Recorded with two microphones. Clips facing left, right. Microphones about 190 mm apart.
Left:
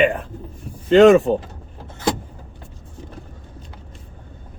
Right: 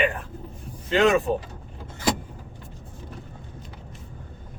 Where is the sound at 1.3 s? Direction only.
90° left.